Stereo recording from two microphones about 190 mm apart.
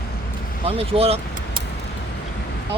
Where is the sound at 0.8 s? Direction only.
30° right (ahead or behind).